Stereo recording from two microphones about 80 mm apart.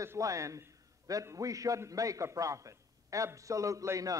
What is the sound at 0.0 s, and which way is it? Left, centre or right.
A man's voice, right.